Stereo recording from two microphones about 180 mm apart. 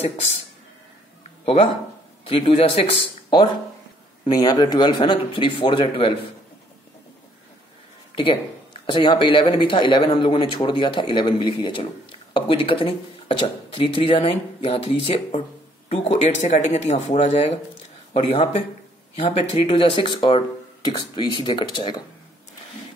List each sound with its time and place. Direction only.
1.4 s speech: 35° left (ahead or behind)
8.1 s a sound: 30° left (ahead or behind)
8.8 s speech: 25° left (ahead or behind)